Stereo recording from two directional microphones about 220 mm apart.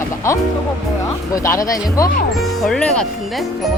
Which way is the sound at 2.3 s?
Centre (ahead or behind).